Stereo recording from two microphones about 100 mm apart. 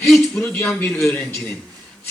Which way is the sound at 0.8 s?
25° left (ahead or behind).